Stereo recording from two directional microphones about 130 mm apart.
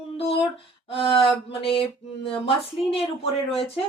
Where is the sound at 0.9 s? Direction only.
45° left (ahead or behind).